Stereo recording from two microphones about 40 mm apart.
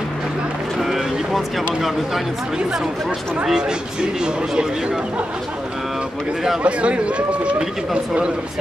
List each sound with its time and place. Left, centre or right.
0.7 s a sound: centre
3.4 s speech: centre
6.6 s speech: right